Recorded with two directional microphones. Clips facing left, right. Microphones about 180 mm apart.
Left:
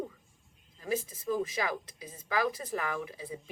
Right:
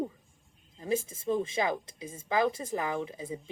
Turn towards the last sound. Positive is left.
turn(degrees=-25)  # may be behind; listen again after turning